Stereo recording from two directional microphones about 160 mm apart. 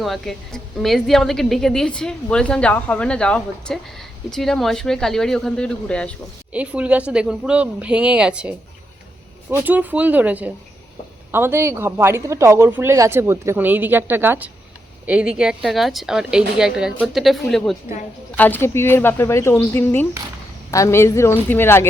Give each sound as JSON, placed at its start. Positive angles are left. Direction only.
{"t": 0.0, "sound": "a woman's voice", "side_deg": 0}
{"t": 6.5, "sound": "a woman's voice", "side_deg": -10}
{"t": 9.6, "sound": "a woman's voice", "side_deg": -10}